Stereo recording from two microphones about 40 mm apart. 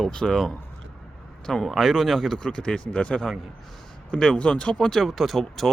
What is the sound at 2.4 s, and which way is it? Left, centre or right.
Speech, left.